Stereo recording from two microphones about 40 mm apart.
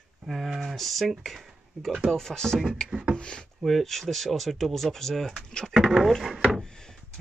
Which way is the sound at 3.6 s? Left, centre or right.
Centre.